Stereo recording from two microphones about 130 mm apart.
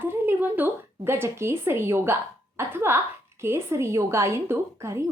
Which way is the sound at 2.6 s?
15° right (ahead or behind).